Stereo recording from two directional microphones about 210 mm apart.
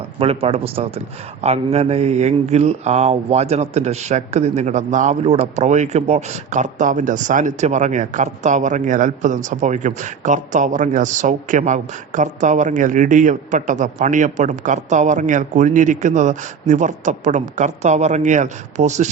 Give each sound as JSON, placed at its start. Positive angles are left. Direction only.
{"t": 0.2, "sound": "a man's voice", "side_deg": -30}